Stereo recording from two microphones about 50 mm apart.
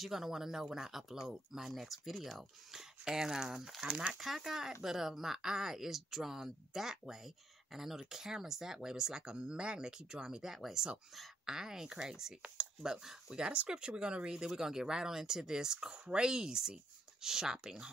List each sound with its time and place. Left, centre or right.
0.0 s speech: centre
2.8 s speech: centre
3.8 s speech: centre
4.2 s speech: centre
14.5 s speech: centre